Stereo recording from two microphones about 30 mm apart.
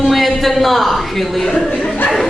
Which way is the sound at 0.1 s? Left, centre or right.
Centre.